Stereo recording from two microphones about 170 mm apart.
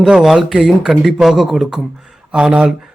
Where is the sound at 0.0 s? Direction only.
Centre (ahead or behind).